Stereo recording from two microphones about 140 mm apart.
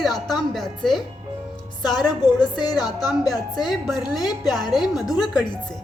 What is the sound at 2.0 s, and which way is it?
A woman's voice, 30° left (ahead or behind).